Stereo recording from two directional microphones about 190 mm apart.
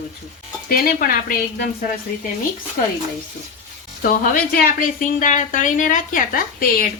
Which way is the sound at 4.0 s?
45° left (ahead or behind).